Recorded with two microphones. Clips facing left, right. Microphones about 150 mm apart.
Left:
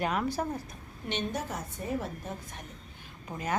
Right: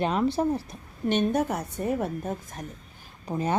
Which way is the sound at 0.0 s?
25° right (ahead or behind).